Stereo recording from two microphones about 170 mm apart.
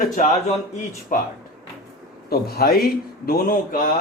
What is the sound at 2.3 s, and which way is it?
A man's voice, 65° left (ahead or behind).